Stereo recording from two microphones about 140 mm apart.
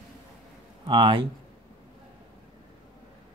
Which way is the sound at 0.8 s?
35° right (ahead or behind).